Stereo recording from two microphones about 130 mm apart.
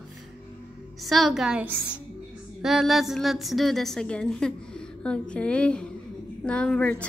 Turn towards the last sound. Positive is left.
turn(degrees=10)  # may be behind; listen again after turning